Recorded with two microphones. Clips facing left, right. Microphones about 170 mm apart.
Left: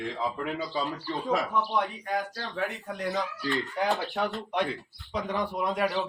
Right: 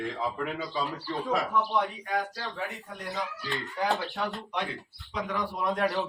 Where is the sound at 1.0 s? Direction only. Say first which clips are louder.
Left 1 dB; centre (ahead or behind).